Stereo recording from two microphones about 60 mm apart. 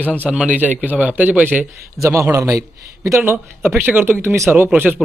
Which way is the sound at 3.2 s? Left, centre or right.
Right.